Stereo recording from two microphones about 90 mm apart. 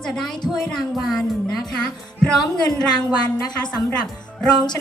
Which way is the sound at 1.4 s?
5° left (ahead or behind).